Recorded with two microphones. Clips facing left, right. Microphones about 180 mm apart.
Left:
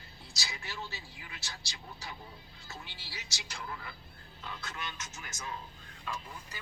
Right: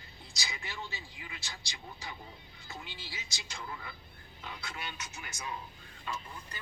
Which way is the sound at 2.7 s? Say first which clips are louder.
Right 2 dB; 20° right (ahead or behind).